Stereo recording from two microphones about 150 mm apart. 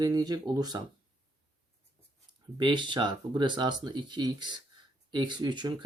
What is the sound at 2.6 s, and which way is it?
Speech, 30° right (ahead or behind).